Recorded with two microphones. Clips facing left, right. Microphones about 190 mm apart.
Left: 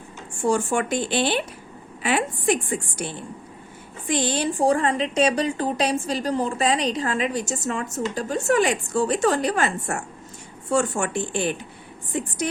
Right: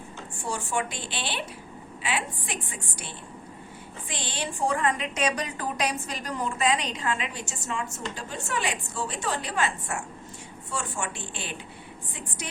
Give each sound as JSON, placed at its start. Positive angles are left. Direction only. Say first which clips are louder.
{"t": 0.4, "sound": "a woman's voice", "louder": "left 9 dB", "side_deg": 50}
{"t": 4.1, "sound": "a woman's voice", "louder": "left 11 dB", "side_deg": 40}